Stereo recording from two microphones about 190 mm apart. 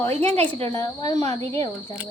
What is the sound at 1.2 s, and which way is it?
Speech, 35° right (ahead or behind).